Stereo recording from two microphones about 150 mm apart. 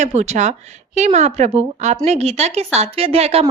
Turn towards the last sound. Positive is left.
turn(degrees=-40)  # may be behind; listen again after turning